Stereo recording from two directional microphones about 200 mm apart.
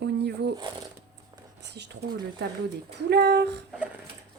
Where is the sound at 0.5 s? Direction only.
20° right (ahead or behind).